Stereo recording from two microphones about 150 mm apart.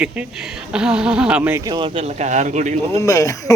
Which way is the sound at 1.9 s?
45° right (ahead or behind).